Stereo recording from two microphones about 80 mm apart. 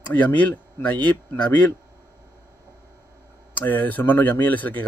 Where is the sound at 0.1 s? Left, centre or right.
Left.